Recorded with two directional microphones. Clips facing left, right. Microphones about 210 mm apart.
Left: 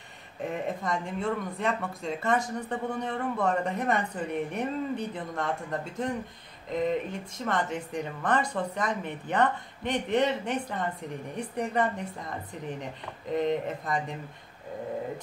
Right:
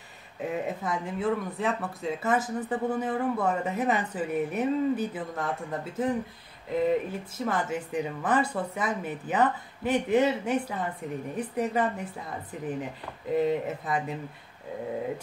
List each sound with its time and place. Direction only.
0.4 s speech: 5° right (ahead or behind)
13.4 s speech: 5° right (ahead or behind)